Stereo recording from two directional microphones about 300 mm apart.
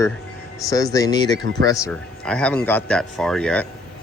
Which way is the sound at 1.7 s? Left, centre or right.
Centre.